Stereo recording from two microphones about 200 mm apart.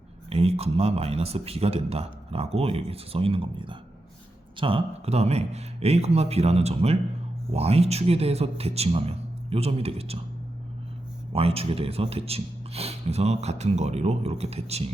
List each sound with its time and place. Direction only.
0.3 s speech: 30° right (ahead or behind)
11.3 s speech: 30° right (ahead or behind)